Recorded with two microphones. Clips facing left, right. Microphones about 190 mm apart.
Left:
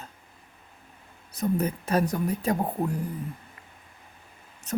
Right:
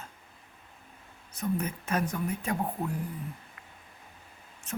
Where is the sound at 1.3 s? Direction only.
35° left (ahead or behind).